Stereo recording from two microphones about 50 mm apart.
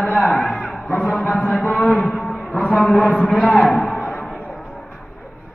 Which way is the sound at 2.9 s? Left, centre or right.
Left.